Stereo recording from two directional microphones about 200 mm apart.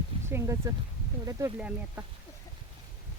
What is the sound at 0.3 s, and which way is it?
Speech, 15° right (ahead or behind).